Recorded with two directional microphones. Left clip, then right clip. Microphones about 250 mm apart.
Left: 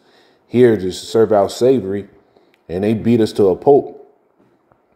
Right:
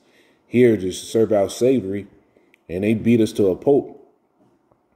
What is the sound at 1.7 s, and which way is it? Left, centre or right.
Speech, centre.